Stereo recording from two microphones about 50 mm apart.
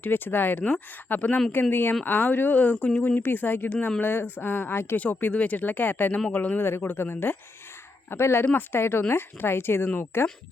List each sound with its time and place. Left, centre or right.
0.0 s speech: left
0.6 s speech: left
2.7 s speech: centre
3.2 s speech: left
4.0 s speech: left
4.9 s speech: left